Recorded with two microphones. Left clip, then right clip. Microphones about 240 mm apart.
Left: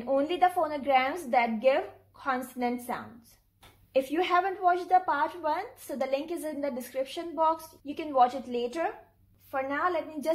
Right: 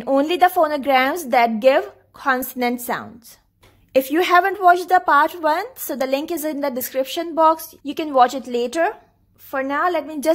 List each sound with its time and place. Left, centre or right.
0.0 s a woman's voice: right